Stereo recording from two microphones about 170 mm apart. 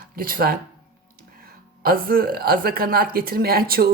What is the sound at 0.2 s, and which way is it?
Speech, 55° right (ahead or behind).